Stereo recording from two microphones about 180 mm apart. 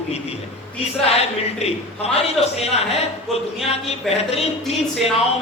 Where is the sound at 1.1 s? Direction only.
35° left (ahead or behind).